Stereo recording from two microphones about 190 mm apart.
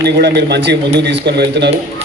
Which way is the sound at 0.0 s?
60° right (ahead or behind).